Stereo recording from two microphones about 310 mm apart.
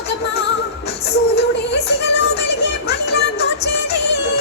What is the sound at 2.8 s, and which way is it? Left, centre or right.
Music, left.